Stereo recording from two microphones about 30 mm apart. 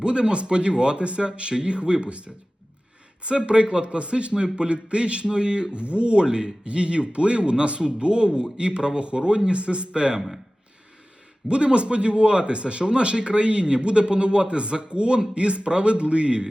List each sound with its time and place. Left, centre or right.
0.0 s speech: right
5.7 s speech: right
6.2 s speech: right
11.4 s speech: right